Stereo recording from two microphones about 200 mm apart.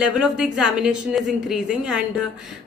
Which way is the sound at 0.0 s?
5° right (ahead or behind).